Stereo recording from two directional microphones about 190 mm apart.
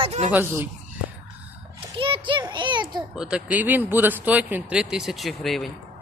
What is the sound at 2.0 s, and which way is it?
Child singing, 25° right (ahead or behind).